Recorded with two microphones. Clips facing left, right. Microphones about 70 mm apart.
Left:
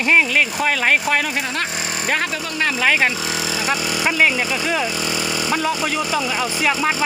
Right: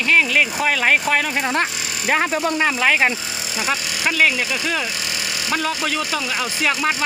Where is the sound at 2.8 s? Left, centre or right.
Centre.